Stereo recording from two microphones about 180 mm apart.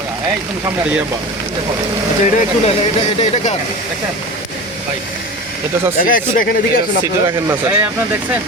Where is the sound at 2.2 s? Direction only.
40° left (ahead or behind).